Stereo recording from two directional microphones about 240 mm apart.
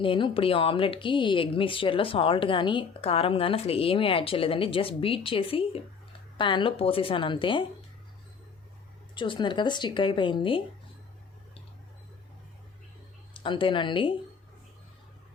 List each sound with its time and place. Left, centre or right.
0.0 s speech: left
9.1 s speech: centre
13.3 s speech: left